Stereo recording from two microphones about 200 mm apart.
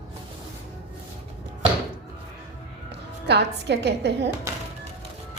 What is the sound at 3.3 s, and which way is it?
A woman's voice, 55° right (ahead or behind).